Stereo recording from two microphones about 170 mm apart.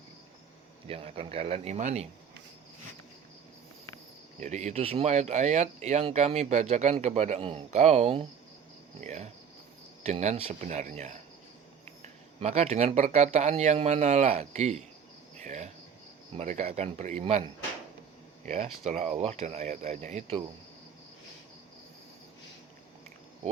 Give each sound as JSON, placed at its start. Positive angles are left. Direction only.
{"t": 0.9, "sound": "speech", "side_deg": -35}
{"t": 4.4, "sound": "speech", "side_deg": -45}
{"t": 15.4, "sound": "cricket", "side_deg": -45}
{"t": 16.3, "sound": "speech", "side_deg": -40}